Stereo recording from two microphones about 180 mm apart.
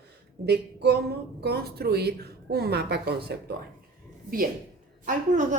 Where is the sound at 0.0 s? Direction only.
65° right (ahead or behind).